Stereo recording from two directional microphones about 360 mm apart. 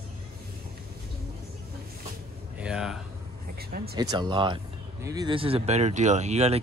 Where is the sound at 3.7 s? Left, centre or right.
Right.